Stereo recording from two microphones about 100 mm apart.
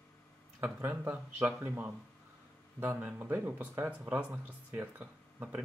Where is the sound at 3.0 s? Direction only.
15° right (ahead or behind).